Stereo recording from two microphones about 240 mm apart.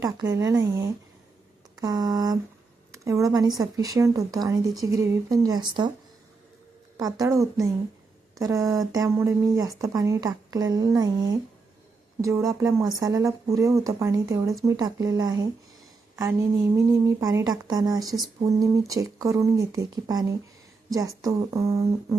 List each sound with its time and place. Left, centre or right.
0.0 s a woman's voice: centre
6.9 s a woman's voice: centre